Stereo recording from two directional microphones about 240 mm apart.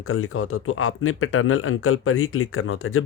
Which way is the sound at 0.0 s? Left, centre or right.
Left.